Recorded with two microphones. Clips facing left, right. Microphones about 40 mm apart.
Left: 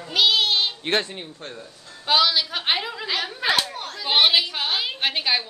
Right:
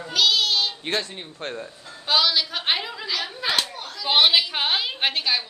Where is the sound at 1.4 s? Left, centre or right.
Right.